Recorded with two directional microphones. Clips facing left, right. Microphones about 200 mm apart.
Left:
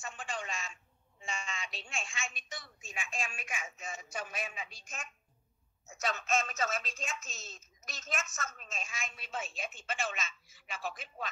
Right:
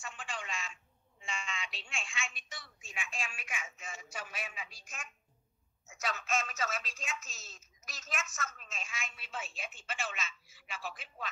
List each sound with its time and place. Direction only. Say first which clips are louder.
0.0 s telephone: left 3 dB; 40° left (ahead or behind)
1.2 s a woman's voice: left 1 dB; 40° left (ahead or behind)
5.9 s a woman's voice: left 3 dB; 40° left (ahead or behind)